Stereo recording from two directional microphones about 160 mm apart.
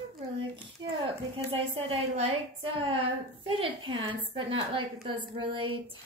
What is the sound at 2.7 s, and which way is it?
A woman's voice, 35° right (ahead or behind).